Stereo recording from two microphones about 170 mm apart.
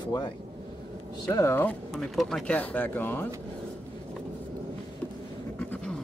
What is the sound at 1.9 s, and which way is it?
Speech, centre (ahead or behind).